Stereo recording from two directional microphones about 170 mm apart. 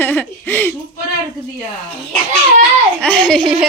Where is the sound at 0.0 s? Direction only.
10° left (ahead or behind).